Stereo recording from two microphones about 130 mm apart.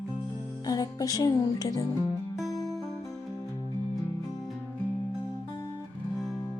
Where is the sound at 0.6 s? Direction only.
30° left (ahead or behind).